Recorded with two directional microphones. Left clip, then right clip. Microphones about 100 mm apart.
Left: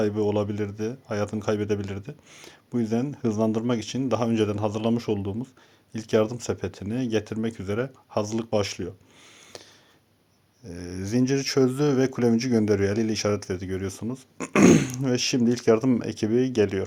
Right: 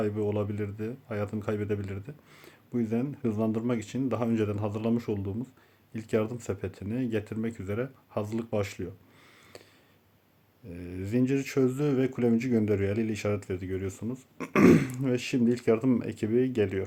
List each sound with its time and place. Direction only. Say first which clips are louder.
0.0 s speech: left 5 dB; 40° left (ahead or behind)
10.7 s speech: left 4 dB; 45° left (ahead or behind)